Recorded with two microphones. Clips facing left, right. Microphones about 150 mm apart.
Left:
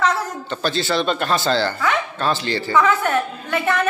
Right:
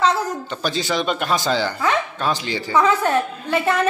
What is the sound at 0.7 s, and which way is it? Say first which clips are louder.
A man's voice: left 1 dB; 15° right (ahead or behind).